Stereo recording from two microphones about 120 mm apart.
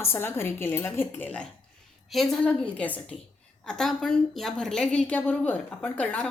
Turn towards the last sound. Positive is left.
turn(degrees=10)  # may be behind; listen again after turning